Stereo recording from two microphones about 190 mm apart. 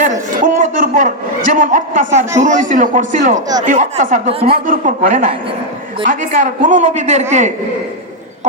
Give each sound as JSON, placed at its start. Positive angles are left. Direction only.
{"t": 0.0, "sound": "a man's voice", "side_deg": -40}
{"t": 4.6, "sound": "a man's voice", "side_deg": -45}